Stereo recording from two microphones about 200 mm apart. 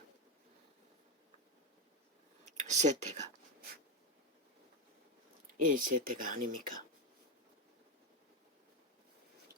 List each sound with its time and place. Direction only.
2.4 s speech: 35° right (ahead or behind)
5.6 s speech: 40° right (ahead or behind)